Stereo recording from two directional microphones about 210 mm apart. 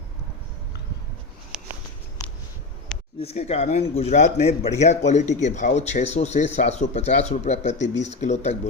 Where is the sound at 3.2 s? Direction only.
30° left (ahead or behind).